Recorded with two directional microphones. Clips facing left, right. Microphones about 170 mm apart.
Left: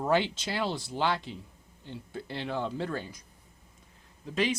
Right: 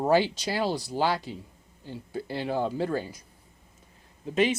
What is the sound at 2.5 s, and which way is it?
Speech, 40° right (ahead or behind).